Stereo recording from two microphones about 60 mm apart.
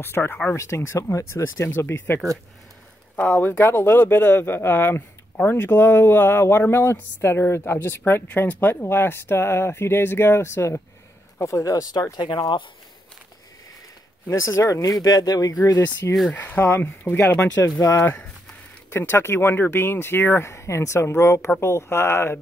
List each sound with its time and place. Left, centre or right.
0.0 s speech: left
0.6 s speech: left
3.2 s speech: left
11.3 s speech: left
14.3 s speech: left
16.3 s speech: left
17.6 s speech: left
18.9 s speech: left
20.4 s speech: left